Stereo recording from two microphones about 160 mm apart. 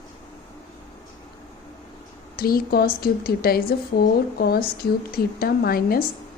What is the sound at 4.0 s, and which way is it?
Speech, 90° left.